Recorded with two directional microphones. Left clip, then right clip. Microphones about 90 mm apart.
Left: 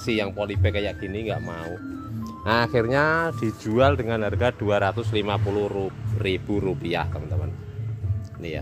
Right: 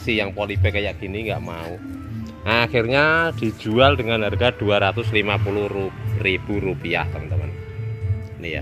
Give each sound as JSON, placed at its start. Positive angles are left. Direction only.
{"t": 0.0, "sound": "speech", "side_deg": 20}
{"t": 2.4, "sound": "speech", "side_deg": 30}
{"t": 2.8, "sound": "speech", "side_deg": 15}
{"t": 3.2, "sound": "speech", "side_deg": 0}
{"t": 6.2, "sound": "speech", "side_deg": 40}